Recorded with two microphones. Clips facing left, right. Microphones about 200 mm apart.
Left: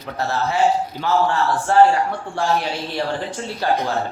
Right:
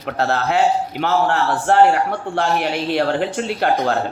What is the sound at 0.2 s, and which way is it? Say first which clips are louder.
A man's voice: right 2 dB; 75° right (ahead or behind).